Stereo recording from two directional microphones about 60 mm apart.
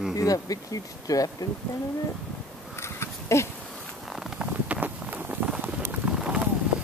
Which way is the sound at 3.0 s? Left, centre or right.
Left.